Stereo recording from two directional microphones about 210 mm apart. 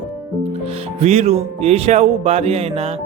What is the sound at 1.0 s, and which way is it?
Speech, 30° right (ahead or behind).